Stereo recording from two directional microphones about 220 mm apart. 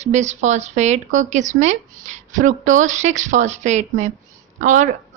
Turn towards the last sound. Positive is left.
turn(degrees=-35)  # may be behind; listen again after turning